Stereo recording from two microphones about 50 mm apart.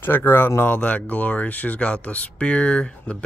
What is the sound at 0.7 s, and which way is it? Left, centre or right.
Speech, left.